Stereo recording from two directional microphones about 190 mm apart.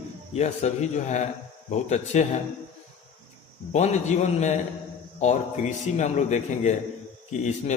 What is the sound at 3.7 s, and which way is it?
Speech, 35° left (ahead or behind).